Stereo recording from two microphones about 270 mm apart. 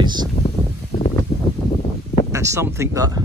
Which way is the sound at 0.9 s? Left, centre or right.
Left.